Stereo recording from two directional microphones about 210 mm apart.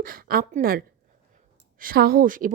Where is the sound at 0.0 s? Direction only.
45° right (ahead or behind).